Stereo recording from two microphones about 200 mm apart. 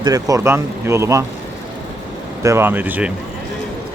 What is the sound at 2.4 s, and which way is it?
Speech, 15° right (ahead or behind).